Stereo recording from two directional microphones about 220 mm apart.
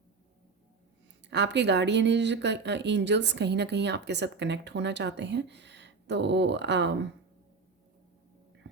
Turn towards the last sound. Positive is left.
turn(degrees=-50)  # may be behind; listen again after turning